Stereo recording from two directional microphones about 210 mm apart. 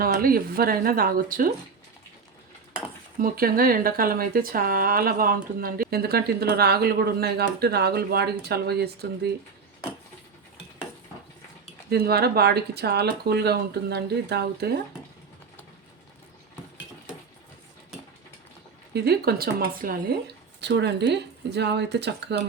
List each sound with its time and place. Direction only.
0.0 s speech: 45° right (ahead or behind)
3.2 s speech: 45° right (ahead or behind)
11.9 s speech: 50° right (ahead or behind)
18.9 s speech: 50° right (ahead or behind)